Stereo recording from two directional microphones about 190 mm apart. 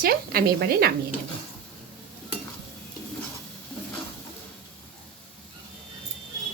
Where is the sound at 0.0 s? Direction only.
55° right (ahead or behind).